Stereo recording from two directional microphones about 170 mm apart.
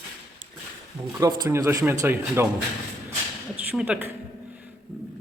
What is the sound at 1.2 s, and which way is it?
A man's voice, 20° right (ahead or behind).